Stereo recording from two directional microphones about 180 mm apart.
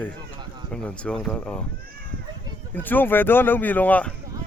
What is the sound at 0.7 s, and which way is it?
Speech, 5° left (ahead or behind).